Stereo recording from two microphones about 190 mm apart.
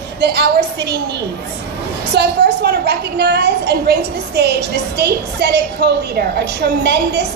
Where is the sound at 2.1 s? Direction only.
60° right (ahead or behind).